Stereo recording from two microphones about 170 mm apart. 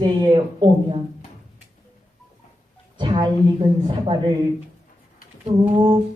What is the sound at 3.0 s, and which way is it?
Speech, 30° right (ahead or behind).